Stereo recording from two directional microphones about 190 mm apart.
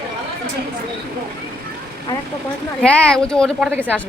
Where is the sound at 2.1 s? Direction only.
20° left (ahead or behind).